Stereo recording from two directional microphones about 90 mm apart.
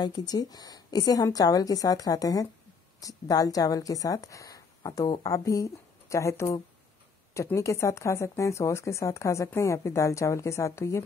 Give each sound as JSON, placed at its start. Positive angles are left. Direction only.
{"t": 0.0, "sound": "a woman's voice", "side_deg": 45}